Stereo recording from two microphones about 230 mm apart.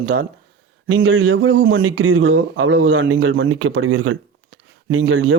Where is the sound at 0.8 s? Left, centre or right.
Right.